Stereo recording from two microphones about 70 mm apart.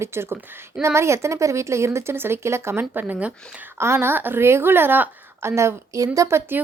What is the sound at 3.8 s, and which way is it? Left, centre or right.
A woman's voice, right.